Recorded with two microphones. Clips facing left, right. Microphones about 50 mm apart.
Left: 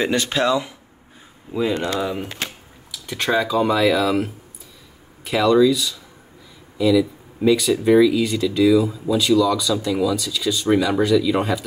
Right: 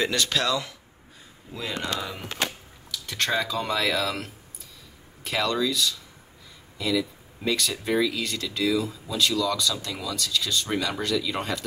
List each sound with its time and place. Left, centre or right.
0.0 s speech: left; by 11.6 s centre